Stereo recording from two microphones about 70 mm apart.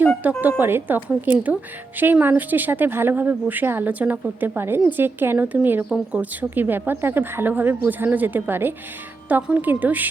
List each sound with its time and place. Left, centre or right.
0.2 s speech: right